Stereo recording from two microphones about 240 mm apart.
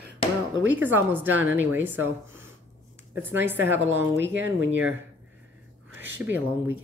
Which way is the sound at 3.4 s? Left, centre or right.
Centre.